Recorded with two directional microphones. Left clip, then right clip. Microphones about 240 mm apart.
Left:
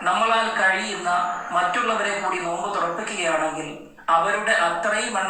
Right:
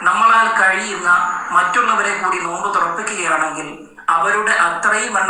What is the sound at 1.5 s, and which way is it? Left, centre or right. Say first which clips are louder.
A man's voice: right 8 dB; right.